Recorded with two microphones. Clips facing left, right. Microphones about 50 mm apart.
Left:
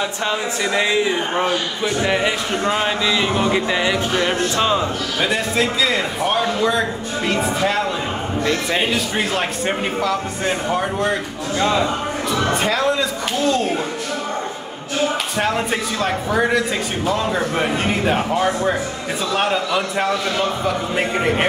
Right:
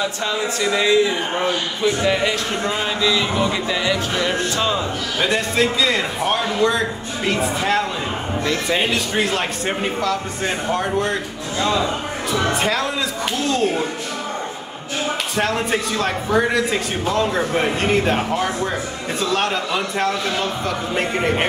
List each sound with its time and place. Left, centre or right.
0.0 s speech: left
5.2 s a man's voice: centre
12.6 s a man's voice: centre
15.3 s a man's voice: centre